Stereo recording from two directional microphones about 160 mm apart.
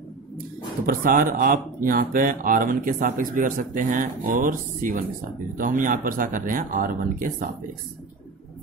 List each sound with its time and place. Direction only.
0.8 s speech: 60° right (ahead or behind)